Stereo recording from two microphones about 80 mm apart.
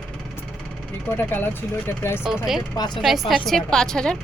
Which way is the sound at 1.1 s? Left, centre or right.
Left.